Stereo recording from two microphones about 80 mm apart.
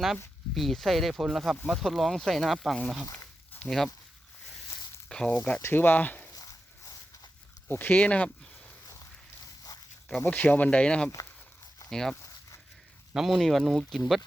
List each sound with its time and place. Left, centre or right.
0.5 s speech: centre
5.0 s a sound: centre
5.3 s speech: left
6.3 s dog: left
7.7 s speech: left
10.2 s speech: centre
13.1 s speech: centre